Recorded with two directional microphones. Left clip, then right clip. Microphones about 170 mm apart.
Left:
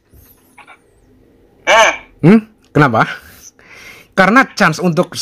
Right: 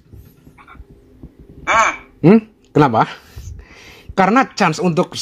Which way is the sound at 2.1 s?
40° left (ahead or behind).